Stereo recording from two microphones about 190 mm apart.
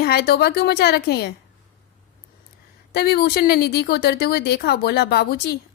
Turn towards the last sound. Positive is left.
turn(degrees=55)  # may be behind; listen again after turning